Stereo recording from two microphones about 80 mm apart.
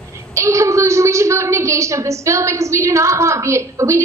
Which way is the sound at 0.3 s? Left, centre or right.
Right.